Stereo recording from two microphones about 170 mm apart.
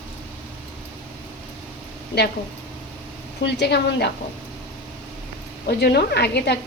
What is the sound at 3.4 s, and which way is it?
Speech, 85° left.